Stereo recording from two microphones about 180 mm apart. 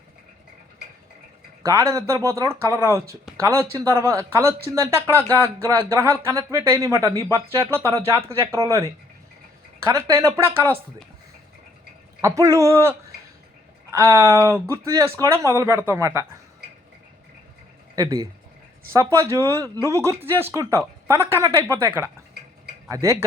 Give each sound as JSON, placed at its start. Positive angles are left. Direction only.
{"t": 1.6, "sound": "speech", "side_deg": -15}
{"t": 12.2, "sound": "speech", "side_deg": -15}
{"t": 17.9, "sound": "speech", "side_deg": -20}